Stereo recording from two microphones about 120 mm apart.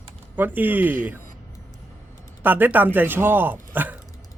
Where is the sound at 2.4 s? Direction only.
15° right (ahead or behind).